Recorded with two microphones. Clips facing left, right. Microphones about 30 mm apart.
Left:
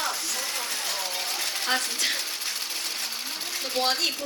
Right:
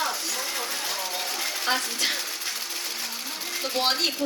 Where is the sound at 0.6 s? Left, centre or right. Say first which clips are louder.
Right 1 dB; centre.